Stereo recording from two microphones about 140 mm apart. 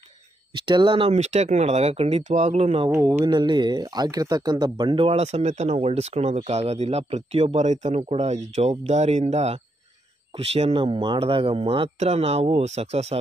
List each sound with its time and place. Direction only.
0.6 s speech: 35° right (ahead or behind)
2.9 s speech: 20° right (ahead or behind); by 13.2 s 50° right (ahead or behind)